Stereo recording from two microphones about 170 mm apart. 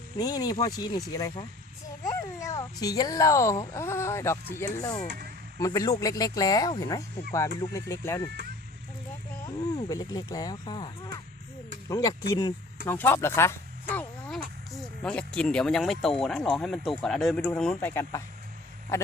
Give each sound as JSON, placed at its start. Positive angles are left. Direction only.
{"t": 0.2, "sound": "speech", "side_deg": 20}
{"t": 5.0, "sound": "speech", "side_deg": -65}
{"t": 5.5, "sound": "speech", "side_deg": 20}
{"t": 9.7, "sound": "speech", "side_deg": 20}
{"t": 12.9, "sound": "a sound", "side_deg": 10}
{"t": 15.3, "sound": "speech", "side_deg": 5}